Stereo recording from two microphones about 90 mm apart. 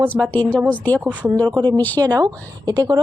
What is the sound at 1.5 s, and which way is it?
Speech, 45° right (ahead or behind).